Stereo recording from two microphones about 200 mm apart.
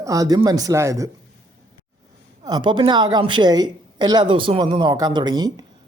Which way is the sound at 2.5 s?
20° right (ahead or behind).